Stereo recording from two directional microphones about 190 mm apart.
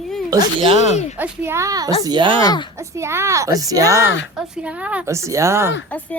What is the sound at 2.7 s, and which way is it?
A woman's voice, 15° right (ahead or behind).